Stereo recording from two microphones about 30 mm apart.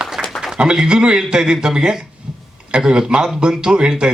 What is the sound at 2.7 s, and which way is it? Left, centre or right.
A man's voice, right.